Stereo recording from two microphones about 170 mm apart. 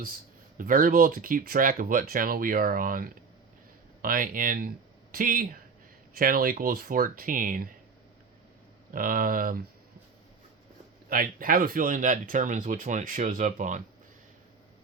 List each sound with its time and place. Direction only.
0.5 s speech: 55° right (ahead or behind)
8.9 s speech: 55° right (ahead or behind)
11.1 s speech: 55° right (ahead or behind)